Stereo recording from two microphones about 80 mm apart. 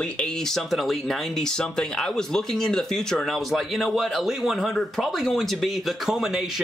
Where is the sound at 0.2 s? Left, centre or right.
Centre.